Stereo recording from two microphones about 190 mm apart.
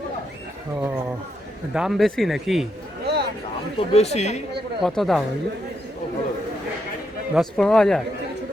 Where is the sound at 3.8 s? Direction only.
35° left (ahead or behind).